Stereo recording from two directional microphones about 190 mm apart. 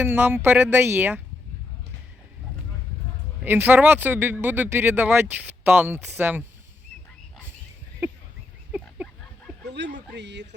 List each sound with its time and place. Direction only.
0.0 s speech: 10° right (ahead or behind)
3.4 s speech: 10° right (ahead or behind)
8.7 s a sound: 10° right (ahead or behind)
9.6 s bow-wow: 65° right (ahead or behind)
10.2 s speech: 65° right (ahead or behind)